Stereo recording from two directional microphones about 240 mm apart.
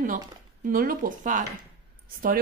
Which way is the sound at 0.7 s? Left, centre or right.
Right.